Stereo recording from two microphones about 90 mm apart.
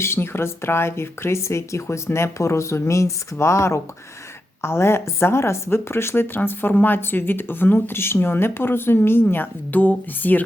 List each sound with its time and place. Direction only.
0.0 s a woman's voice: 30° left (ahead or behind)